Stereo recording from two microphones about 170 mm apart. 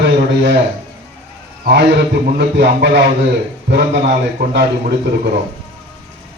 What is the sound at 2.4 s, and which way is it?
A man's voice, 85° right.